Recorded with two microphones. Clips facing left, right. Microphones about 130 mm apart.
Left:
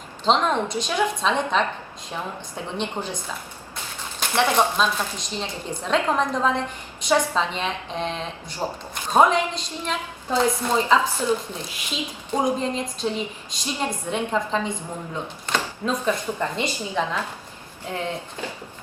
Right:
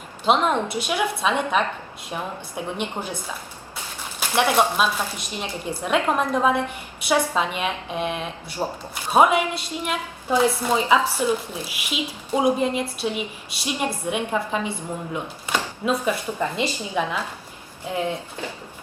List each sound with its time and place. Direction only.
0.3 s a woman's voice: 10° right (ahead or behind)
4.2 s a woman's voice: 10° right (ahead or behind)